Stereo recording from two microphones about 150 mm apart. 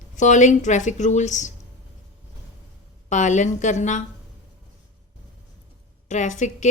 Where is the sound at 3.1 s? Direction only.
55° left (ahead or behind).